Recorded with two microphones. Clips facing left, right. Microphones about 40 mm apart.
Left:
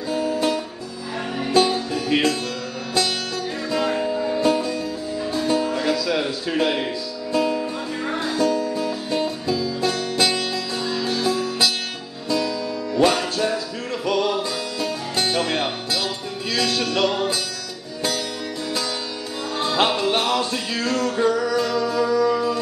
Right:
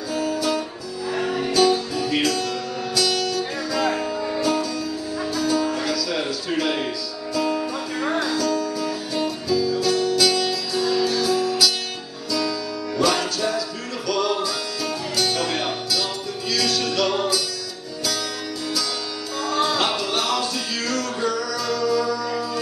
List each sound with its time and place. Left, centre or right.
0.1 s music: left
3.7 s music: left
4.0 s music: centre
4.4 s music: left
8.1 s music: left
19.5 s music: left